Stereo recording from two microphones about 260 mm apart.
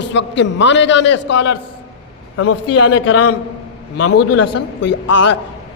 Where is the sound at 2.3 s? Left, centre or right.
Left.